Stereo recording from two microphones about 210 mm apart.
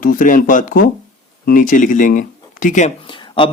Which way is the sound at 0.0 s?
40° left (ahead or behind).